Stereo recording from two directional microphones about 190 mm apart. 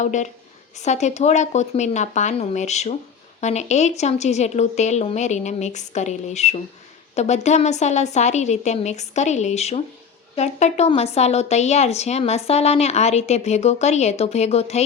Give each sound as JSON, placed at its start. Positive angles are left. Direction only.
{"t": 0.0, "sound": "a woman's voice", "side_deg": 40}